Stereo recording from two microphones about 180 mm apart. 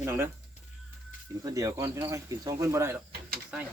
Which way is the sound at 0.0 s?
10° right (ahead or behind).